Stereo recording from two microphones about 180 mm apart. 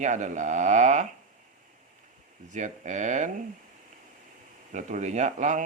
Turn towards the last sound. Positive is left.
turn(degrees=-40)  # may be behind; listen again after turning